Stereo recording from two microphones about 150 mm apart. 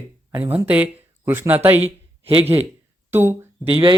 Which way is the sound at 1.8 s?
40° right (ahead or behind).